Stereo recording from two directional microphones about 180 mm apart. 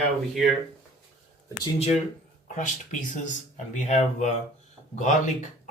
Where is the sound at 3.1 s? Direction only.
45° left (ahead or behind).